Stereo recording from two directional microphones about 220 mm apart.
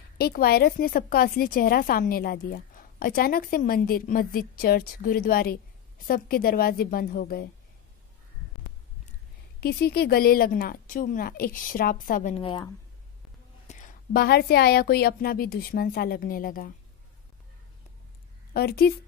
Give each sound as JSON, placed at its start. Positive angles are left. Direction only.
{"t": 0.2, "sound": "a woman's voice", "side_deg": 45}
{"t": 9.6, "sound": "a woman's voice", "side_deg": 45}
{"t": 12.4, "sound": "speech", "side_deg": 20}
{"t": 13.7, "sound": "a woman's voice", "side_deg": 35}
{"t": 18.5, "sound": "a woman's voice", "side_deg": 45}